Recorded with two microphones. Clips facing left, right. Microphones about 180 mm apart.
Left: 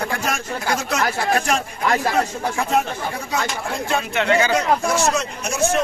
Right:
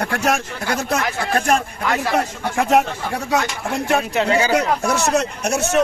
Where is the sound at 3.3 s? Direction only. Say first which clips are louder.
Right 4 dB; 70° right (ahead or behind).